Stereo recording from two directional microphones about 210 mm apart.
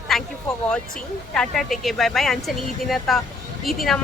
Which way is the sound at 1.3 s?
Centre (ahead or behind).